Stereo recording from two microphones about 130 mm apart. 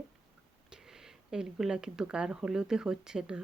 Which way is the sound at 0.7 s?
5° right (ahead or behind).